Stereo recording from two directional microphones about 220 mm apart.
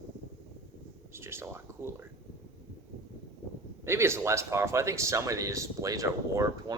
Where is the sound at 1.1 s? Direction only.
10° right (ahead or behind).